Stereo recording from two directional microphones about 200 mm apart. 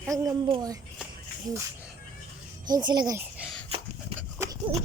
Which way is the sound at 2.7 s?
20° right (ahead or behind).